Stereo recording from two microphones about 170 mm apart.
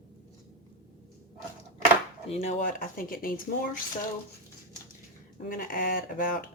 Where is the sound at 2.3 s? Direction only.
40° left (ahead or behind).